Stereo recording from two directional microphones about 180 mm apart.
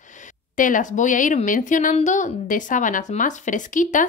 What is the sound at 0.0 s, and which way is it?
Speech, 45° left (ahead or behind).